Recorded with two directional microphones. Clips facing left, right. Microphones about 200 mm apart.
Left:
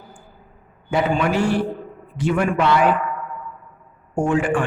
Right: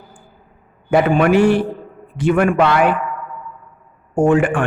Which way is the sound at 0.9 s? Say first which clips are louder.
Right 6 dB; 55° right (ahead or behind).